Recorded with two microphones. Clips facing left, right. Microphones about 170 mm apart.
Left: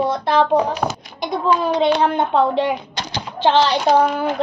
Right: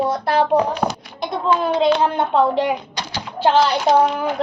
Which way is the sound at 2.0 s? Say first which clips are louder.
Even; 10° right (ahead or behind).